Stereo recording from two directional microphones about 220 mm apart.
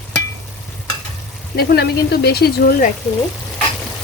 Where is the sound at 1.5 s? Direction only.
45° left (ahead or behind).